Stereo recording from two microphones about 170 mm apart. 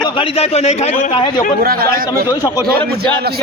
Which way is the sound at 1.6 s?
60° right (ahead or behind).